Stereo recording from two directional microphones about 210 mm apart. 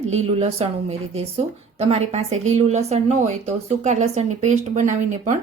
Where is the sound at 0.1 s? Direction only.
30° right (ahead or behind).